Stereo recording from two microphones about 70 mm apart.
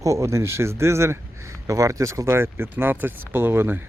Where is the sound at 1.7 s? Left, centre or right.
Right.